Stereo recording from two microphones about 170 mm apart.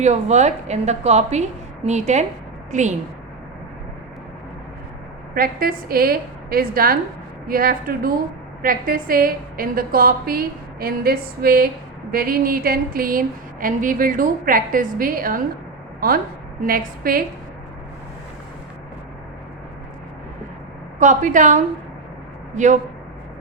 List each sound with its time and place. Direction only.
0.0 s a woman's voice: 40° right (ahead or behind)
5.3 s a woman's voice: 60° right (ahead or behind)
21.0 s a woman's voice: 45° right (ahead or behind)